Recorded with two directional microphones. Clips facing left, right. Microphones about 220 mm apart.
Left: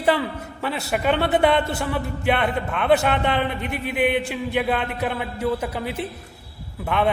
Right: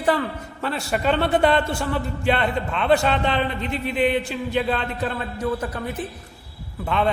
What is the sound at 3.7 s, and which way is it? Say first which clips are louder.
Speech: right 1 dB; 60° left (ahead or behind).